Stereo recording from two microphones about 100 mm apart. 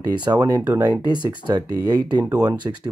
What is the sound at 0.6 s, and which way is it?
Speech, 20° right (ahead or behind).